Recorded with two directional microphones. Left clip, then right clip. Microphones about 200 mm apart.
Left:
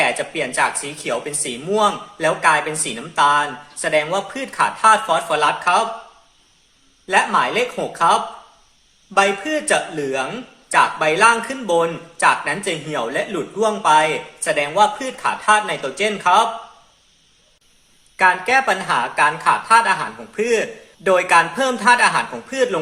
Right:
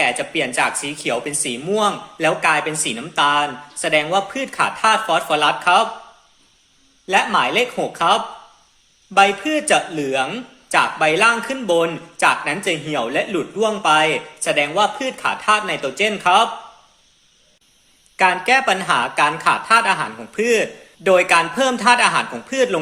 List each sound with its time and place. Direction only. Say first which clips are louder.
0.0 s a man's voice: even; 30° right (ahead or behind)
7.1 s a man's voice: even; 30° right (ahead or behind)
18.2 s speech: even; 30° right (ahead or behind)